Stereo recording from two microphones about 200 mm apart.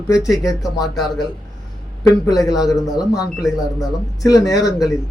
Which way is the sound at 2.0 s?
20° left (ahead or behind).